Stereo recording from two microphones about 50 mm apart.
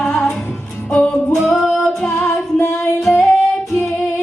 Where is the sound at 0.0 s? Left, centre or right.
Centre.